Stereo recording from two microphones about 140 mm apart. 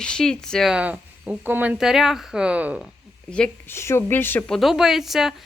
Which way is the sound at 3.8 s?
20° left (ahead or behind).